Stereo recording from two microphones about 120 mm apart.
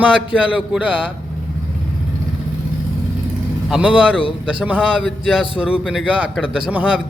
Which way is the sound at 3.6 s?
5° right (ahead or behind).